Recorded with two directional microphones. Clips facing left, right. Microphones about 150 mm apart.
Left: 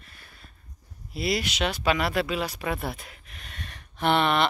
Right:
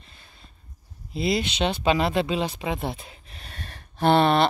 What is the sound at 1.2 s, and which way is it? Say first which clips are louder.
Speech: right 3 dB; 25° right (ahead or behind).